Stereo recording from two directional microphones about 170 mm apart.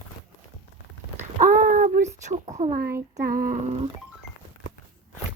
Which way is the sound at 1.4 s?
50° right (ahead or behind).